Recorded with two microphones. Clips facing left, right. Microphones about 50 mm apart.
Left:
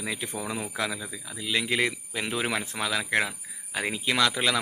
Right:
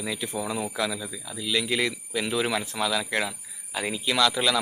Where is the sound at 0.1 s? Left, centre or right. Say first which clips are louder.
Right 3 dB; left.